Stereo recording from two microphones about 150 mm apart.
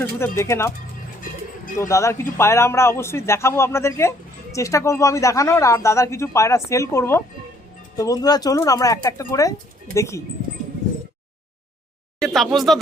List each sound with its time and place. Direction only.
0.0 s a man's voice: 15° left (ahead or behind)
1.9 s a man's voice: 20° left (ahead or behind)
12.2 s speech: centre (ahead or behind)